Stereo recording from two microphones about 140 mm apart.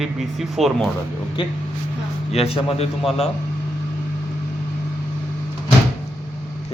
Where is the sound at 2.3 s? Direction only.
45° left (ahead or behind).